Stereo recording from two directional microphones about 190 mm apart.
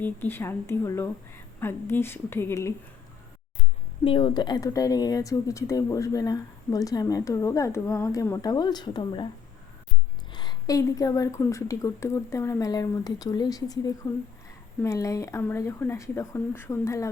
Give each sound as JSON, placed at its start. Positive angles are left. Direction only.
{"t": 0.0, "sound": "a woman's voice", "side_deg": 10}
{"t": 4.0, "sound": "speech", "side_deg": 25}
{"t": 10.3, "sound": "a woman's voice", "side_deg": 20}